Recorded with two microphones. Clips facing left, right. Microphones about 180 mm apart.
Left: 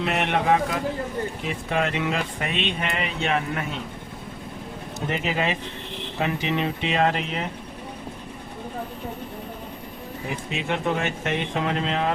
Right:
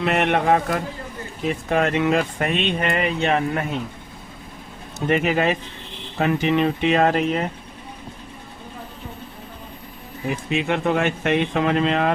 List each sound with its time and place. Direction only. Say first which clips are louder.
0.0 s speech: right 4 dB; 55° right (ahead or behind)
5.0 s speech: right 6 dB; 60° right (ahead or behind)
10.7 s speech: right 3 dB; 65° right (ahead or behind)